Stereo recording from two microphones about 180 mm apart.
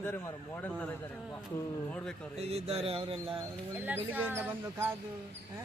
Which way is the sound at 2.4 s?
35° right (ahead or behind).